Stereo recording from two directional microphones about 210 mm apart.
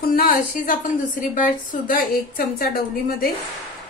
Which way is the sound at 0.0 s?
45° left (ahead or behind).